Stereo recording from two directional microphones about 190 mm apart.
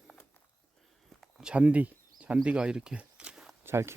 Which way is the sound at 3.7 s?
15° right (ahead or behind).